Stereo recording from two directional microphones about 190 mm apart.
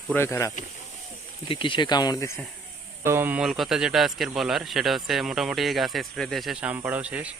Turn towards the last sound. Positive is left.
turn(degrees=-5)  # may be behind; listen again after turning